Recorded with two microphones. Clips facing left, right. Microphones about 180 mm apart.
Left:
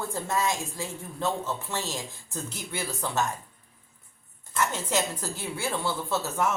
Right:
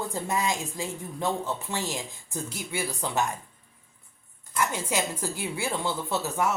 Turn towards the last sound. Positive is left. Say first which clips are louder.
# even
turn(degrees=-15)  # may be behind; listen again after turning